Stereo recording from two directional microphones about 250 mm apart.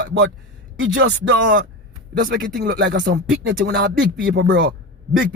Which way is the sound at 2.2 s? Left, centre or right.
Right.